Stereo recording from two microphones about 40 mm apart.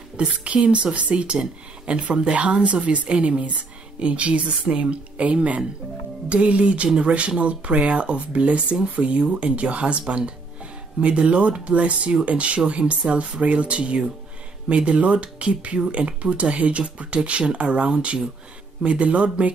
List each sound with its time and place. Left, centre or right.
0.2 s speech: right